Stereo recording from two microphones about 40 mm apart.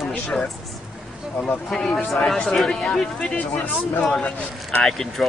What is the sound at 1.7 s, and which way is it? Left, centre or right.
Speech, centre.